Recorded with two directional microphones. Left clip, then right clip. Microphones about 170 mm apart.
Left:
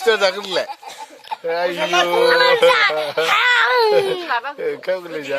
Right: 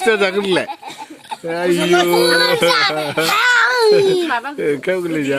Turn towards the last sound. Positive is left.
turn(degrees=-5)  # may be behind; listen again after turning